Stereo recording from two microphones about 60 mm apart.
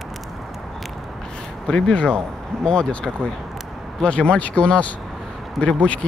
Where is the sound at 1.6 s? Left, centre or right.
Centre.